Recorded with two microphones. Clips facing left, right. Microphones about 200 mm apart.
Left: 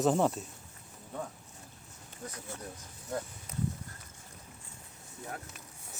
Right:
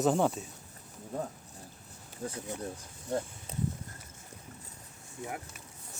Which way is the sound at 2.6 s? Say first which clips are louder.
Right 5 dB; 30° right (ahead or behind).